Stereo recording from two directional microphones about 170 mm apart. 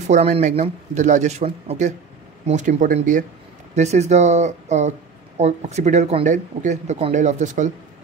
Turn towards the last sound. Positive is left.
turn(degrees=-45)  # may be behind; listen again after turning